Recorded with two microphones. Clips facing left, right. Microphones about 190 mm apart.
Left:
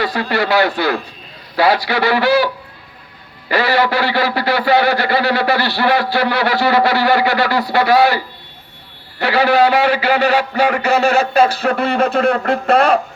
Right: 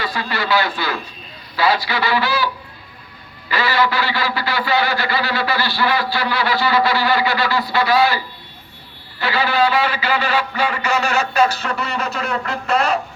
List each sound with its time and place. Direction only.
0.0 s speech: 65° left (ahead or behind)
3.5 s a man's voice: 65° left (ahead or behind)
10.9 s speech: 35° left (ahead or behind)
11.6 s speech: 55° left (ahead or behind)